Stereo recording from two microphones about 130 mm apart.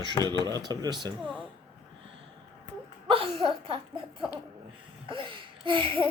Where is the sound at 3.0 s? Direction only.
45° right (ahead or behind).